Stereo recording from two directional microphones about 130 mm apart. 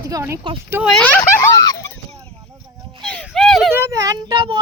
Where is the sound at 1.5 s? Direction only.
25° left (ahead or behind).